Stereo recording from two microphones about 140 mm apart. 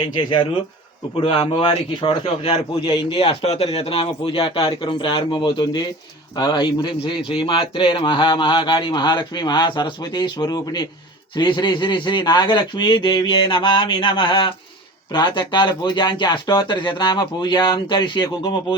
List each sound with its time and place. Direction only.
0.0 s a man's voice: 35° left (ahead or behind)